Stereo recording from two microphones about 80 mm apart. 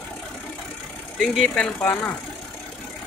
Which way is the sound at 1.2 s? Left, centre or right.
Centre.